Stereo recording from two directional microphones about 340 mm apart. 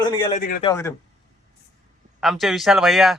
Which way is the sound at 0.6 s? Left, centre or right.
Centre.